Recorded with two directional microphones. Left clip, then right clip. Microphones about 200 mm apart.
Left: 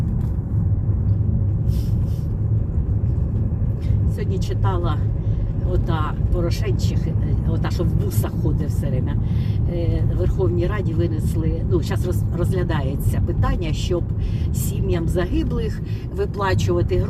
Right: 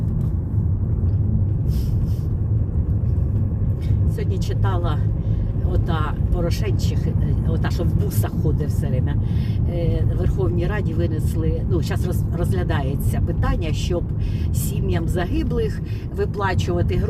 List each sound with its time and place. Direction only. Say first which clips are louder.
4.6 s speech: left 1 dB; 15° right (ahead or behind)
7.5 s speech: left 1 dB; 20° right (ahead or behind)
9.7 s speech: even; 15° right (ahead or behind)